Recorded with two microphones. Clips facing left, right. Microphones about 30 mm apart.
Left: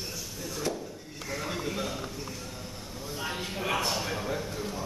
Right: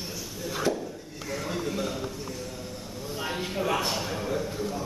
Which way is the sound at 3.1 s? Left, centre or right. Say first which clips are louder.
Right 3 dB; centre.